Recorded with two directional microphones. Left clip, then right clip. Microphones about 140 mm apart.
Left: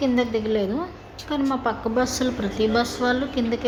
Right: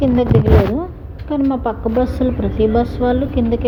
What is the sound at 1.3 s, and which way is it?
A woman's voice, 20° right (ahead or behind).